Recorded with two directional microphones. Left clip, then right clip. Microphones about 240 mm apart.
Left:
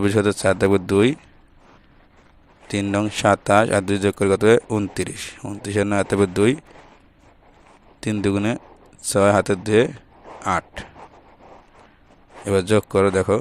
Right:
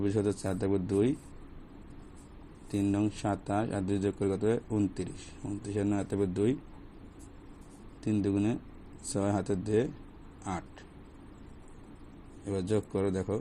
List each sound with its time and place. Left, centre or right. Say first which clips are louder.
0.0 s speech: left 13 dB; left
2.6 s speech: left 8 dB; left
8.0 s speech: left 9 dB; left
12.5 s speech: left 14 dB; left